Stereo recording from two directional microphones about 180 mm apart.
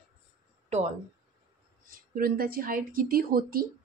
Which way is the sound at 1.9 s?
55° right (ahead or behind).